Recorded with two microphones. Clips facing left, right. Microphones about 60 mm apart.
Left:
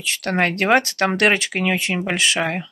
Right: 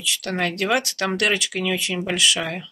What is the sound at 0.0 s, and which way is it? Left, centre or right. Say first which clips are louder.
Speech: left 4 dB; left.